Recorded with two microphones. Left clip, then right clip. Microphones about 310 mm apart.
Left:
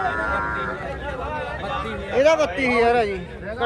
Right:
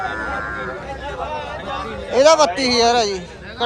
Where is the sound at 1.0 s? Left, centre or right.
Right.